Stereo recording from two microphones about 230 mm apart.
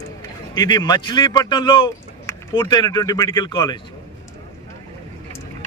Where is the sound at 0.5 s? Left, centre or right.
Centre.